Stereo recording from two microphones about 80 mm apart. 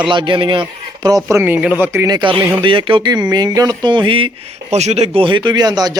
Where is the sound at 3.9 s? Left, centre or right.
Right.